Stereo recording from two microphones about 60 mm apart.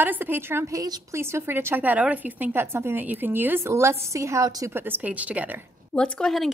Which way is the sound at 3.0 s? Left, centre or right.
Right.